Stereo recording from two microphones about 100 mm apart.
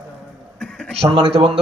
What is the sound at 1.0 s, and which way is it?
Speech, 80° right.